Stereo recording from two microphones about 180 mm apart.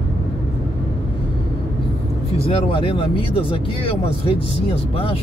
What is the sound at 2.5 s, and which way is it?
Speech, 30° left (ahead or behind).